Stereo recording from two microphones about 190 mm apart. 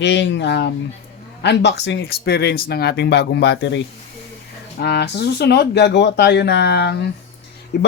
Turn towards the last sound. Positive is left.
turn(degrees=60)  # may be behind; listen again after turning